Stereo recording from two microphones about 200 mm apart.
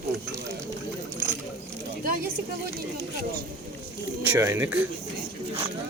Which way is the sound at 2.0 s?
45° right (ahead or behind).